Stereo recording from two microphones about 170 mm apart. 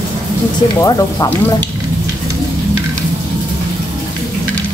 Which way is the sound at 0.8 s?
20° left (ahead or behind).